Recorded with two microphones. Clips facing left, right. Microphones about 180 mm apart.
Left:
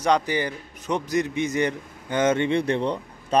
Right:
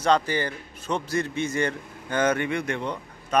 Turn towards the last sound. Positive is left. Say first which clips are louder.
# left 3 dB
turn(degrees=30)  # may be behind; listen again after turning